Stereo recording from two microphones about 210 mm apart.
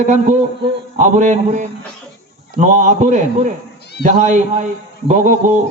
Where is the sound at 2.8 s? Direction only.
35° right (ahead or behind).